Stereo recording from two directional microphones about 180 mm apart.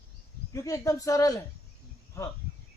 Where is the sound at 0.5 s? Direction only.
20° left (ahead or behind).